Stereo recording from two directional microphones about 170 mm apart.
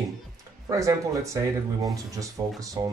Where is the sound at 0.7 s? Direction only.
20° right (ahead or behind).